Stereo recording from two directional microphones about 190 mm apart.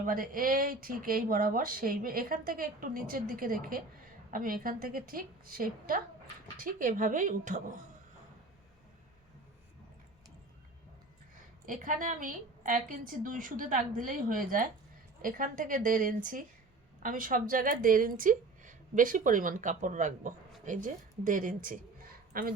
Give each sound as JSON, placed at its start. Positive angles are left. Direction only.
{"t": 0.0, "sound": "speech", "side_deg": -45}
{"t": 11.6, "sound": "a woman's voice", "side_deg": -45}